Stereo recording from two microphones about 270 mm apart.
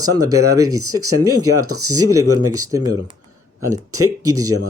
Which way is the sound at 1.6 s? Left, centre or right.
Right.